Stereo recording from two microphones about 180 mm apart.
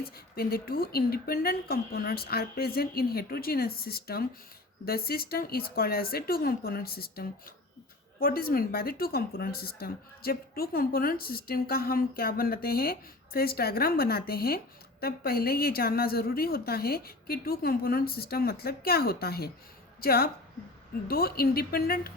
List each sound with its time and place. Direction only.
0.0 s speech: 55° left (ahead or behind)